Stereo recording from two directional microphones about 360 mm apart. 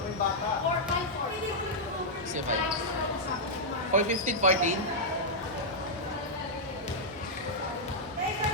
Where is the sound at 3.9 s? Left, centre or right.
Right.